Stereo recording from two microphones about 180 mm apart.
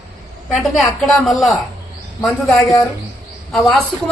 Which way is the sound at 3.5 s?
Centre (ahead or behind).